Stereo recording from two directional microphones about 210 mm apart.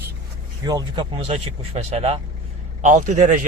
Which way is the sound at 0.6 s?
20° right (ahead or behind).